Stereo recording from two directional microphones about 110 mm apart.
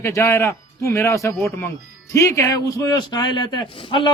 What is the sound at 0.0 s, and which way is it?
A man's voice, 25° left (ahead or behind).